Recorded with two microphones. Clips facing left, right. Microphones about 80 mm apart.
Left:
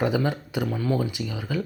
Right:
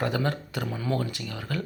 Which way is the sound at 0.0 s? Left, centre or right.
Centre.